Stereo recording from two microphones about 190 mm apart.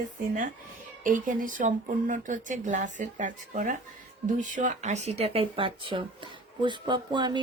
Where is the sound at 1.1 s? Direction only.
45° right (ahead or behind).